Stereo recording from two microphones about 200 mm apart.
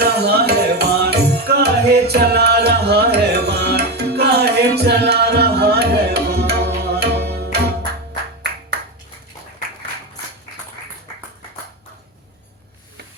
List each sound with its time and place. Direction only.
0.0 s music: 50° right (ahead or behind)